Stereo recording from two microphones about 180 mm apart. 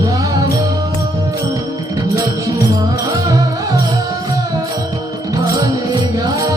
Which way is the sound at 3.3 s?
20° right (ahead or behind).